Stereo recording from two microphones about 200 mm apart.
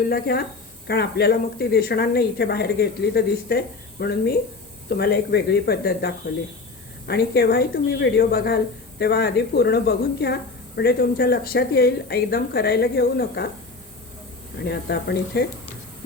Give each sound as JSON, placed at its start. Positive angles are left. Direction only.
{"t": 0.1, "sound": "speech", "side_deg": 50}
{"t": 14.6, "sound": "speech", "side_deg": 55}